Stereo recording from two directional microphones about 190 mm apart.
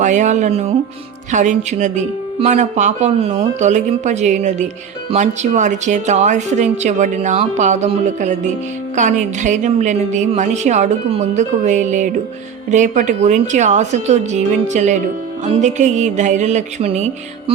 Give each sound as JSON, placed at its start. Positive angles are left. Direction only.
{"t": 0.0, "sound": "speech", "side_deg": -40}